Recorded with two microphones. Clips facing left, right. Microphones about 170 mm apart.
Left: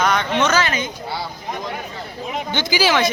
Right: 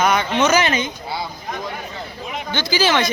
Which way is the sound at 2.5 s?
15° left (ahead or behind).